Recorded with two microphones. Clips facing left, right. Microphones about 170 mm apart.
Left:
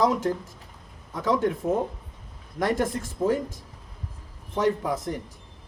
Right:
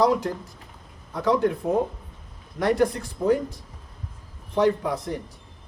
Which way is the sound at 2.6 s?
50° left (ahead or behind).